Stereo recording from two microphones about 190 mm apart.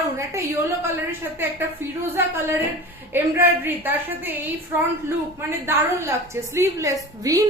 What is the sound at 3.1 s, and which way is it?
A woman's voice, 10° right (ahead or behind).